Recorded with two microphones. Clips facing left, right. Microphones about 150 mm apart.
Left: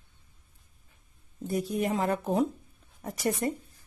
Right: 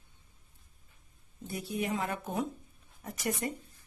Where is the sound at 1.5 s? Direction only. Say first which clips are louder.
Left 6 dB; 45° left (ahead or behind).